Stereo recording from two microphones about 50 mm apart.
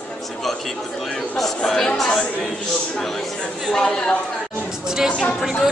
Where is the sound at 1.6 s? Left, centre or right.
Centre.